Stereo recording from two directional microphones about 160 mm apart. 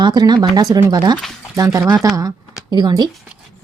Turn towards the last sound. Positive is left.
turn(degrees=-25)  # may be behind; listen again after turning